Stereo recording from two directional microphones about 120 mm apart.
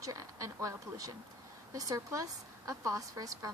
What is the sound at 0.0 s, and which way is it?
A woman's voice, 30° right (ahead or behind).